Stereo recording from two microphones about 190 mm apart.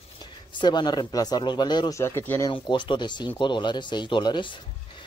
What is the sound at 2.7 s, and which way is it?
Speech, 25° left (ahead or behind).